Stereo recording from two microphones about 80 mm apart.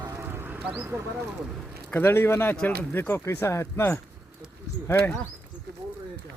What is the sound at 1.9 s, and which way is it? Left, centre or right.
Speech, left.